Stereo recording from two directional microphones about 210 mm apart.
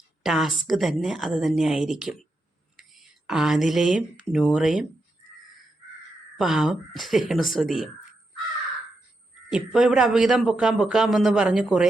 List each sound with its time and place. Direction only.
0.2 s a man's voice: centre (ahead or behind)
6.3 s a man's voice: centre (ahead or behind)
9.5 s a man's voice: centre (ahead or behind)